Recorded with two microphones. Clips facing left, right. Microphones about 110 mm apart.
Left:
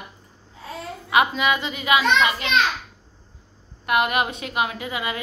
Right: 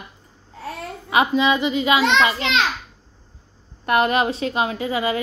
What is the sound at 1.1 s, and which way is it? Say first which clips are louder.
Speech: right 2 dB; 25° right (ahead or behind).